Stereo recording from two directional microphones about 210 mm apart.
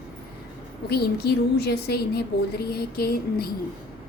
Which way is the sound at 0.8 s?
50° left (ahead or behind).